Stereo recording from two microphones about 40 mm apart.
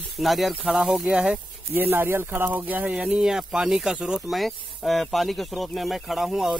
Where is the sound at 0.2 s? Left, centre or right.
Centre.